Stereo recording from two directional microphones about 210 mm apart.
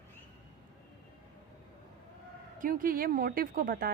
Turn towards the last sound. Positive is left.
turn(degrees=-45)  # may be behind; listen again after turning